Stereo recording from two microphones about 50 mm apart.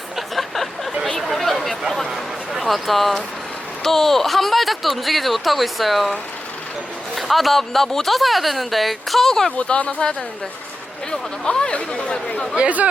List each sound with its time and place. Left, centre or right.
0.2 s a sound: centre
1.2 s chatter: centre
2.0 s a sound: centre
3.8 s speech: centre
7.2 s speech: centre
9.6 s speech: left
12.5 s speech: right